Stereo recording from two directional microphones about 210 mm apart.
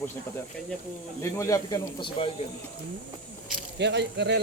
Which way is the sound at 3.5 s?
55° right (ahead or behind).